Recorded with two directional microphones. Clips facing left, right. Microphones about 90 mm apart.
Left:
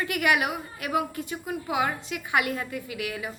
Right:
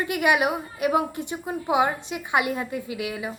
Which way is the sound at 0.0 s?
20° right (ahead or behind).